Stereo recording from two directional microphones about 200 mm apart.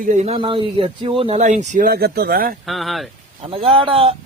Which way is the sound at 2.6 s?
Centre (ahead or behind).